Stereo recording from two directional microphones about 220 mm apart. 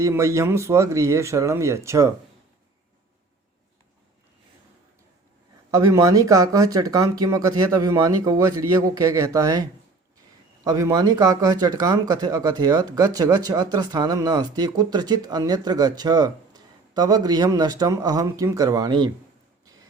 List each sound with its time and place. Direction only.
0.0 s speech: 15° right (ahead or behind)
5.7 s speech: 15° right (ahead or behind)